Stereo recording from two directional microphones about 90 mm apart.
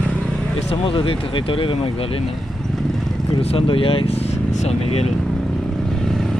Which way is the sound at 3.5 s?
85° left.